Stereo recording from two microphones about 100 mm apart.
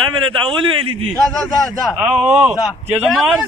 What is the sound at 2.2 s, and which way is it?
Speech, 10° right (ahead or behind).